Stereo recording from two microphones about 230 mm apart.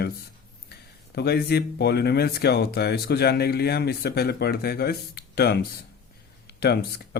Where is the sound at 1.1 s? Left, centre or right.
Left.